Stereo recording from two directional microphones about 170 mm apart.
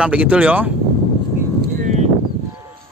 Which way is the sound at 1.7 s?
50° right (ahead or behind).